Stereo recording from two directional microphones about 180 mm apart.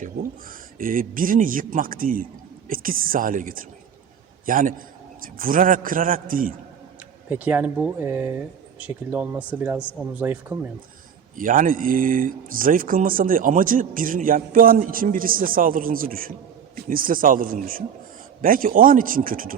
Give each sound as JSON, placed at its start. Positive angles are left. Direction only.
{"t": 0.8, "sound": "a man's voice", "side_deg": -50}
{"t": 7.3, "sound": "speech", "side_deg": -10}
{"t": 11.3, "sound": "speech", "side_deg": -50}